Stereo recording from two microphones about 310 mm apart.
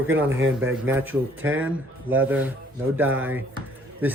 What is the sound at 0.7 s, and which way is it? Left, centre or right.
Speech, centre.